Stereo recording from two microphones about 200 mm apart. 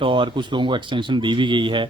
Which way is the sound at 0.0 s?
25° right (ahead or behind).